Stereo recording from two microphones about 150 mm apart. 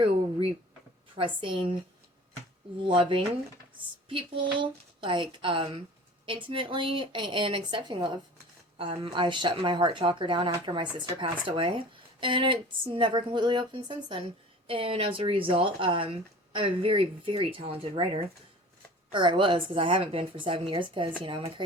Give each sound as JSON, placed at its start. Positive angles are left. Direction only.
{"t": 0.0, "sound": "a sound", "side_deg": -40}
{"t": 1.1, "sound": "speech", "side_deg": -35}
{"t": 2.8, "sound": "speech", "side_deg": -35}